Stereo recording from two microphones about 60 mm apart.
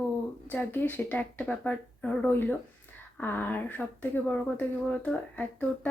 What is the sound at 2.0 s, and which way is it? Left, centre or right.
Speech, left.